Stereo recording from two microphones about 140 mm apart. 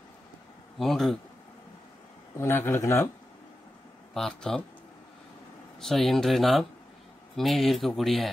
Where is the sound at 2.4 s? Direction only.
15° left (ahead or behind).